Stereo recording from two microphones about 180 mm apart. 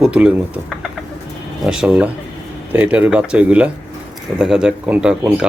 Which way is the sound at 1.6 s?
5° right (ahead or behind).